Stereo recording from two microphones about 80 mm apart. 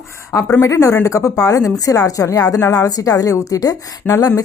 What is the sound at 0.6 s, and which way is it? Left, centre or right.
A woman's voice, left.